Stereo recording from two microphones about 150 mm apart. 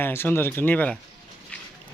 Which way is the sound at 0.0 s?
15° left (ahead or behind).